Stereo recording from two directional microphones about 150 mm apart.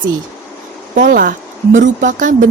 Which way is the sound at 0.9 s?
65° right (ahead or behind).